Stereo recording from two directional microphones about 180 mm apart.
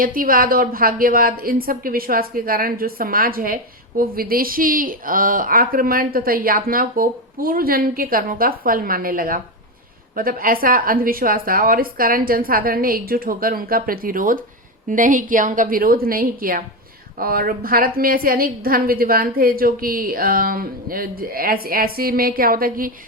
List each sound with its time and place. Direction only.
0.0 s a woman's voice: 50° right (ahead or behind)